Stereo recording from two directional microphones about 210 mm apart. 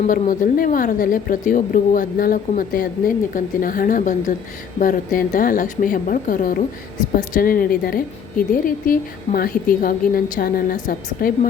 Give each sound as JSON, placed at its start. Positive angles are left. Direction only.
{"t": 0.1, "sound": "a woman's voice", "side_deg": 40}